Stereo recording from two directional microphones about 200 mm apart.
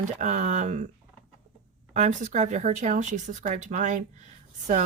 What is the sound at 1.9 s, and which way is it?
Speech, 35° right (ahead or behind).